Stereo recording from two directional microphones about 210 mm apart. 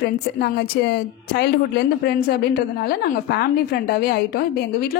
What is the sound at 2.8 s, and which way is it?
A woman's voice, 50° left (ahead or behind).